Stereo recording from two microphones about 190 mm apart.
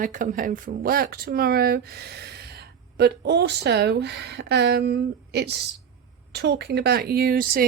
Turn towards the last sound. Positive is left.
turn(degrees=-50)  # may be behind; listen again after turning